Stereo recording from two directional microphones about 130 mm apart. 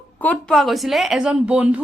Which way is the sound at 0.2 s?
10° left (ahead or behind).